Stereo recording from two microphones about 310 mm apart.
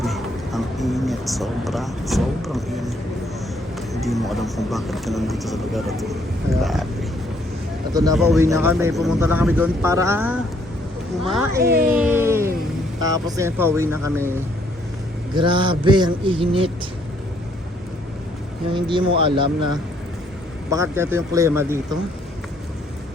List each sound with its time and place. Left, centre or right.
0.0 s a sound: centre
4.0 s speech: centre
8.1 s speech: centre
11.6 s speech: right
11.9 s speech: centre
15.4 s speech: centre
18.7 s speech: centre